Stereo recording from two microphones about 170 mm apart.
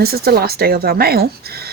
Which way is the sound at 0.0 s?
65° right (ahead or behind).